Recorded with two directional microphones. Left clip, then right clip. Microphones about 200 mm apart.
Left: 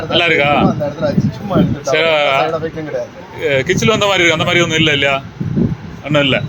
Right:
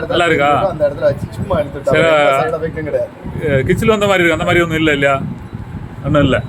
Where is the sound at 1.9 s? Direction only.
15° right (ahead or behind).